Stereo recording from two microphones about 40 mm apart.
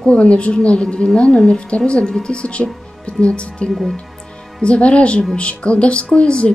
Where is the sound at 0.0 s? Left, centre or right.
Left.